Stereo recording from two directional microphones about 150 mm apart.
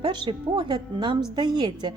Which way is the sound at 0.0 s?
30° right (ahead or behind).